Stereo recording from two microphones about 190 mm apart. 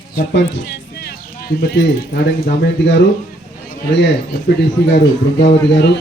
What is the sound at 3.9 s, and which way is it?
Speech, 60° left (ahead or behind).